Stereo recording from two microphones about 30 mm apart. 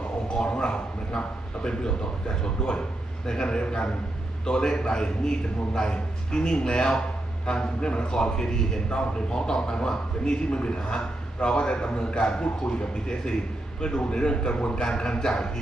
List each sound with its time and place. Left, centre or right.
0.3 s a man's voice: left